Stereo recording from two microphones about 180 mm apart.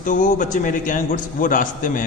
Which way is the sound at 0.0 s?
45° left (ahead or behind).